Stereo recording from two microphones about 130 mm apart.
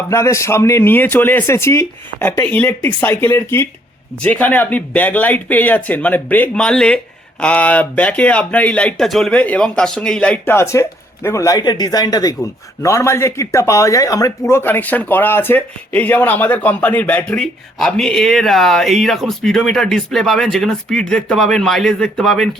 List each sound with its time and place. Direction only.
0.1 s speech: 20° left (ahead or behind); by 22.4 s centre (ahead or behind)